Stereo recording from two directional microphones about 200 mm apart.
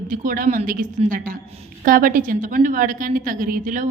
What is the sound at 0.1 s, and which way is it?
A man's voice, 40° right (ahead or behind).